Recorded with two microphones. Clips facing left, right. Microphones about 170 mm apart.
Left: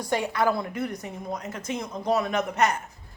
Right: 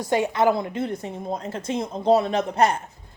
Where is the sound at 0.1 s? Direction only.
20° right (ahead or behind).